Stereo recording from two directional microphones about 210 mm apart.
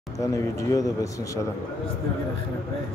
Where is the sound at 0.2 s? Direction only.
15° left (ahead or behind).